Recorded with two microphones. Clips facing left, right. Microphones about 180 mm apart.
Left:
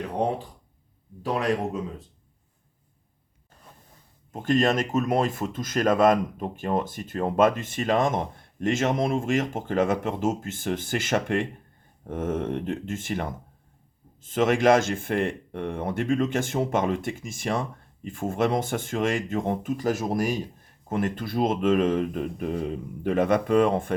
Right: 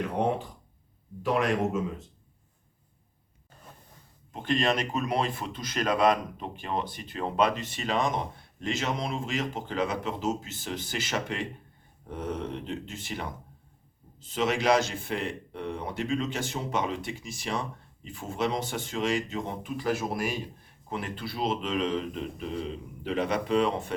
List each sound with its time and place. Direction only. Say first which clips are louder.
1.2 s a man's voice: even; 35° left (ahead or behind)
4.3 s speech: left 5 dB; 45° left (ahead or behind)